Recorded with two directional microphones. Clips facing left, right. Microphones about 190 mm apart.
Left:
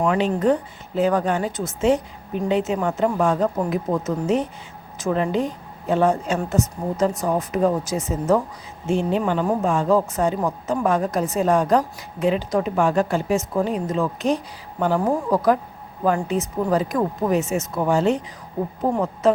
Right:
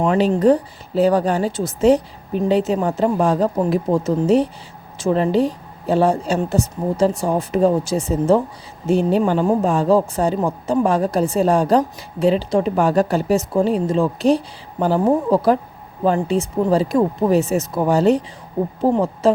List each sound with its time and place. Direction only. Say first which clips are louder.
0.1 s a woman's voice: right 5 dB; 35° right (ahead or behind)